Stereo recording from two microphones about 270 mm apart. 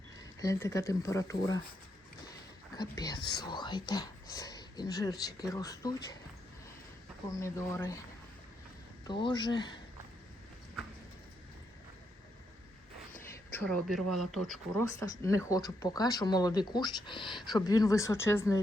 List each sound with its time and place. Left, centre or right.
0.3 s speech: centre
2.7 s speech: centre
7.3 s speech: centre
9.2 s speech: centre
13.1 s a sound: centre
14.1 s speech: centre
14.8 s speech: centre